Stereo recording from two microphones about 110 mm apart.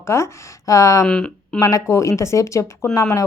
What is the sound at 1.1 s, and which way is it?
Speech, 10° left (ahead or behind).